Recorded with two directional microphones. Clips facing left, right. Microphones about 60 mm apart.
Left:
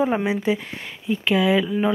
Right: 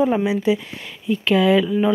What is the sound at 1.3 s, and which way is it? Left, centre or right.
Speech, centre.